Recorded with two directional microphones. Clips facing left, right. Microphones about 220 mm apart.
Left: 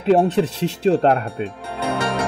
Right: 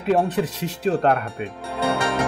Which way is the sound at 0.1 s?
30° left (ahead or behind).